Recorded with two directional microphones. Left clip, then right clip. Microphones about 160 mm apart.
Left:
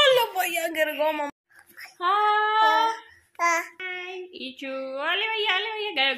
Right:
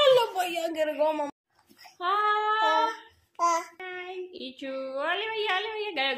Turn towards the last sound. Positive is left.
turn(degrees=35)  # may be behind; listen again after turning